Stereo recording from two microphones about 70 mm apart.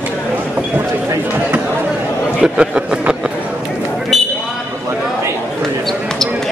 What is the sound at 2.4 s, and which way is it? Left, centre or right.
Speech, centre.